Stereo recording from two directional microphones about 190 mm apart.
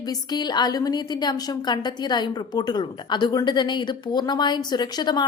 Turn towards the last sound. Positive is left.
turn(degrees=20)  # may be behind; listen again after turning